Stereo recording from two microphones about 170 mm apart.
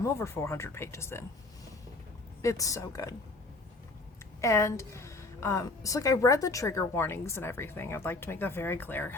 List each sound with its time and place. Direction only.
0.0 s a woman's voice: 15° left (ahead or behind)
2.4 s speech: 20° left (ahead or behind)
4.4 s a woman's voice: 15° left (ahead or behind)